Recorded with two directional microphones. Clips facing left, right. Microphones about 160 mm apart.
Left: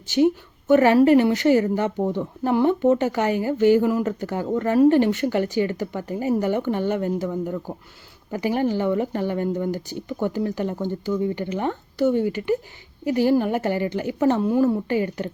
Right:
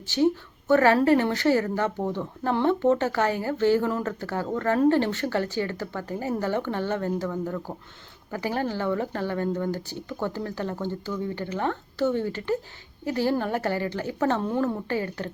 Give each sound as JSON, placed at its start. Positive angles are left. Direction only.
{"t": 0.7, "sound": "speech", "side_deg": 15}